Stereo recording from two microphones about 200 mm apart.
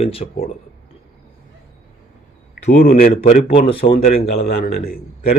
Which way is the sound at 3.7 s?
25° left (ahead or behind).